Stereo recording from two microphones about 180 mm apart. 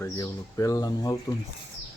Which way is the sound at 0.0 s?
15° left (ahead or behind).